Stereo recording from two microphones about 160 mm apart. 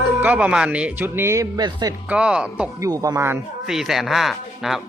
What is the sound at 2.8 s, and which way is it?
Speech, 20° right (ahead or behind).